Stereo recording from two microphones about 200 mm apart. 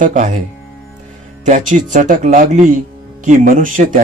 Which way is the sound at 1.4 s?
40° right (ahead or behind).